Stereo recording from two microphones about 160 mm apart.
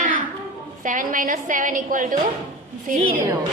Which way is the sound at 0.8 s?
55° right (ahead or behind).